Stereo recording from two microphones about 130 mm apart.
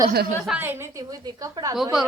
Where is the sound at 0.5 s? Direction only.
15° right (ahead or behind).